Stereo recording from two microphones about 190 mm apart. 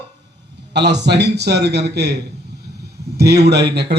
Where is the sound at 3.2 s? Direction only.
60° right (ahead or behind).